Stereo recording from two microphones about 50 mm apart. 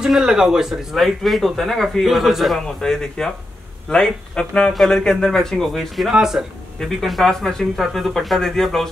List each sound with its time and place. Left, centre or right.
0.0 s speech: centre
1.0 s speech: centre
2.8 s a man's voice: centre
6.1 s speech: centre
6.8 s speech: centre